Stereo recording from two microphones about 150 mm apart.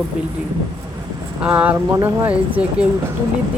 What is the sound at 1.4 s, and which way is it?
Speech, 10° right (ahead or behind).